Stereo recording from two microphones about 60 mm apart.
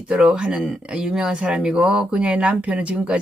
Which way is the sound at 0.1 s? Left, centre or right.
Centre.